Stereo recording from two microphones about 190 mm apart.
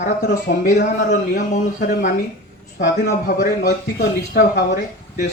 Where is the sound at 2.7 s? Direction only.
50° left (ahead or behind).